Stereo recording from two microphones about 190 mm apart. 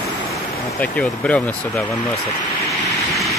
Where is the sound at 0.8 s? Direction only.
5° left (ahead or behind).